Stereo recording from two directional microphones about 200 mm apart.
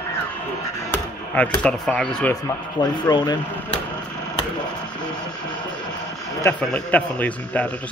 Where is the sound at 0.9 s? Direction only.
5° left (ahead or behind).